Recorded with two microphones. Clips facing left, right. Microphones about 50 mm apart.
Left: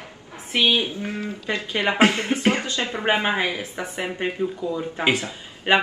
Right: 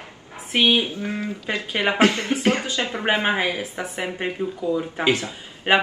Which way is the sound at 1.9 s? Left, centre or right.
Left.